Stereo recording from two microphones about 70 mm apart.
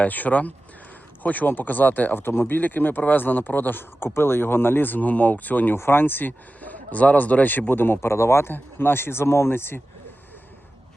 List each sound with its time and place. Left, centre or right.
0.0 s speech: left